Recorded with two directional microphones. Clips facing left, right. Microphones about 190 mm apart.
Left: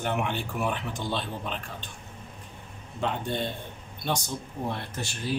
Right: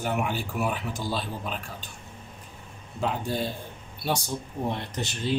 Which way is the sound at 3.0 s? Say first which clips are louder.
Right 1 dB; 5° right (ahead or behind).